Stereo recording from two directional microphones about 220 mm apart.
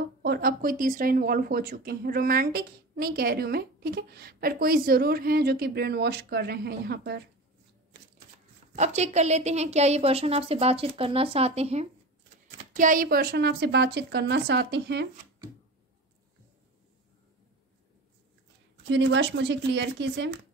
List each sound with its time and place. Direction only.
0.0 s speech: 45° right (ahead or behind)
8.7 s a woman's voice: 30° right (ahead or behind); by 15.0 s 50° right (ahead or behind)
18.9 s speech: 55° right (ahead or behind)